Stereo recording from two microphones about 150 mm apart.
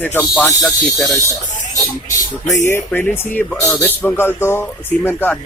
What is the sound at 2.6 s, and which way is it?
Speech, 15° left (ahead or behind).